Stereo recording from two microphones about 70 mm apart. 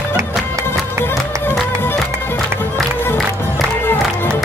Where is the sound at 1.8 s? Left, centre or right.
Left.